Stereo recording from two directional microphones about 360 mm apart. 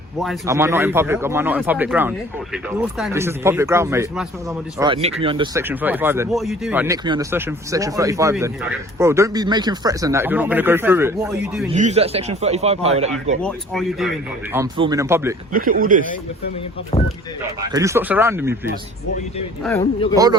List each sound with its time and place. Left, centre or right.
0.2 s speech: centre
11.7 s speech: centre
13.4 s speech: centre
14.5 s speech: centre
15.5 s speech: right
17.7 s speech: centre
19.8 s speech: centre